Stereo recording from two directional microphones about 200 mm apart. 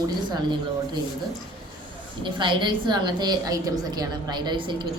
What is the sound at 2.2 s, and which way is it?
A woman's voice, 25° right (ahead or behind).